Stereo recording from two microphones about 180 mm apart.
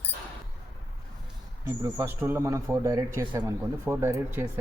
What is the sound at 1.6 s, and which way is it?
Speech, 15° right (ahead or behind).